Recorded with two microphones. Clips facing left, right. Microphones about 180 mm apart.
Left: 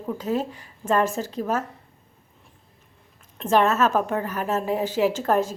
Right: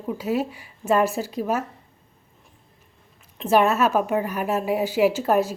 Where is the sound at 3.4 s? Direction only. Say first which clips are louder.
Right 1 dB; 10° right (ahead or behind).